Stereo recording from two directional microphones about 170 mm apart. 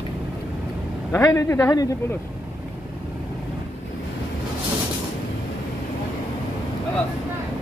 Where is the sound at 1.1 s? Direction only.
20° left (ahead or behind).